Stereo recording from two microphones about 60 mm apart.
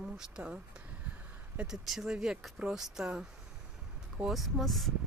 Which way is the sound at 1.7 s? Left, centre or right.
Centre.